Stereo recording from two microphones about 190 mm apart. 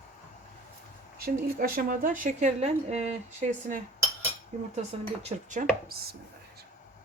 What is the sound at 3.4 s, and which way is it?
Dishes, 40° right (ahead or behind).